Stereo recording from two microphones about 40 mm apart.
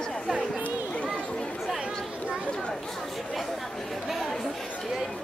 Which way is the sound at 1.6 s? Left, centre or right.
Centre.